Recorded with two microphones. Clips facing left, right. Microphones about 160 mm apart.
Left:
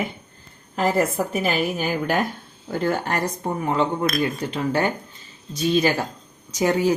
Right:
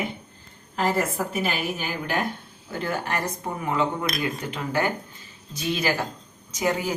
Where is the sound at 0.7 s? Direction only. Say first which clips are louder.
Left 4 dB; 45° left (ahead or behind).